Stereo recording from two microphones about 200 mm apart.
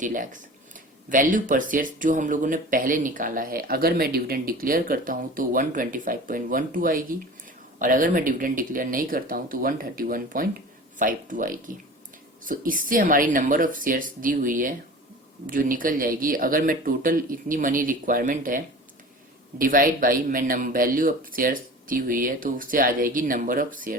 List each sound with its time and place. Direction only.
0.0 s speech: 40° right (ahead or behind)